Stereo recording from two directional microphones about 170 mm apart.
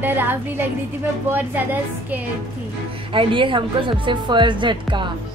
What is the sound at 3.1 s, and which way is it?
A woman's voice, 30° right (ahead or behind).